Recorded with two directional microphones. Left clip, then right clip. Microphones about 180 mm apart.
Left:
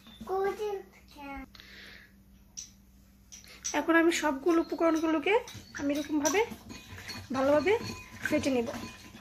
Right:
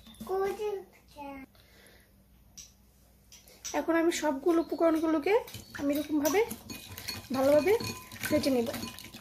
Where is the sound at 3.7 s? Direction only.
5° right (ahead or behind).